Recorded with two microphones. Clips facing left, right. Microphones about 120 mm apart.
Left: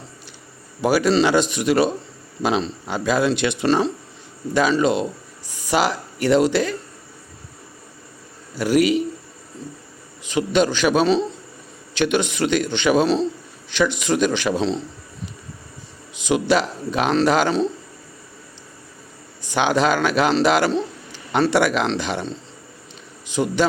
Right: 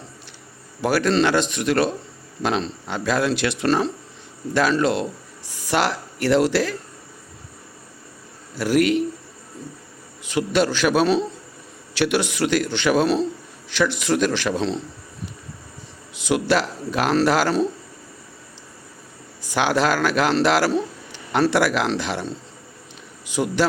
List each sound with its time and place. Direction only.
0.8 s speech: 5° left (ahead or behind)
8.5 s speech: centre (ahead or behind)
10.2 s speech: centre (ahead or behind)
16.1 s speech: centre (ahead or behind)
19.5 s speech: centre (ahead or behind)